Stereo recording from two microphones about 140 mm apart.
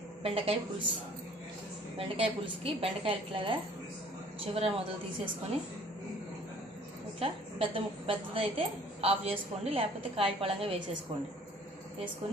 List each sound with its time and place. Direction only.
0.2 s a woman's voice: 45° right (ahead or behind)
2.0 s a woman's voice: 40° right (ahead or behind)
7.2 s a woman's voice: 40° right (ahead or behind)